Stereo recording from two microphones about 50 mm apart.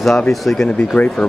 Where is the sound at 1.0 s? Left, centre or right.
Left.